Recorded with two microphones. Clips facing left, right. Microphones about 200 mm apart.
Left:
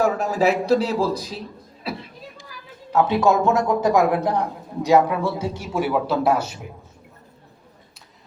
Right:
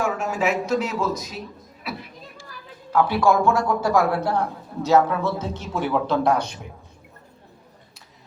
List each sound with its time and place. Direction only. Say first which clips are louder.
0.0 s speech: left 4 dB; 35° left (ahead or behind)
1.8 s a sound: left 3 dB; 30° left (ahead or behind)
2.9 s a man's voice: left 1 dB; 20° left (ahead or behind); by 6.6 s 5° left (ahead or behind)